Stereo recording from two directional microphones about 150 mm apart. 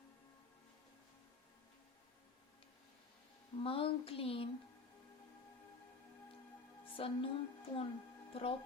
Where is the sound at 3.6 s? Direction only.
35° left (ahead or behind).